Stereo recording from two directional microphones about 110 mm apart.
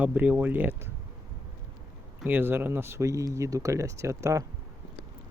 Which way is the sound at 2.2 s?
20° right (ahead or behind).